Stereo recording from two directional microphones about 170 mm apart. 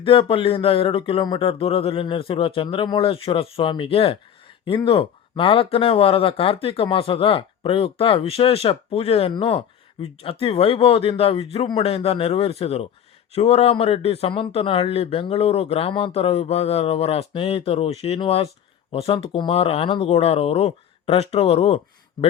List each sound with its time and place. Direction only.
0.0 s speech: 30° left (ahead or behind)